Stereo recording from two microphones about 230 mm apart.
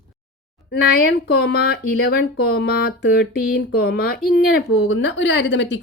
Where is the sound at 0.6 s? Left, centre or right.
Left.